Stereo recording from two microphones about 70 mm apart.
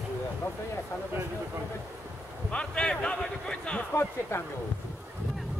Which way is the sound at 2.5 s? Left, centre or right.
Centre.